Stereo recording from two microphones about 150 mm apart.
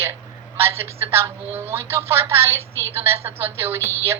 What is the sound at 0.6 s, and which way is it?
A woman's voice, 15° right (ahead or behind).